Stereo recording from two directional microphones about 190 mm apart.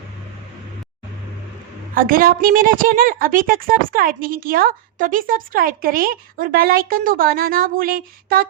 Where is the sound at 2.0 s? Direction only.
50° right (ahead or behind).